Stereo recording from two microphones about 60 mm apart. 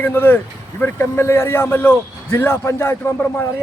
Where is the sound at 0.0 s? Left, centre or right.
Left.